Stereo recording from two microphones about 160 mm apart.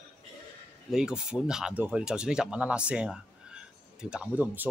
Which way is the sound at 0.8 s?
5° right (ahead or behind).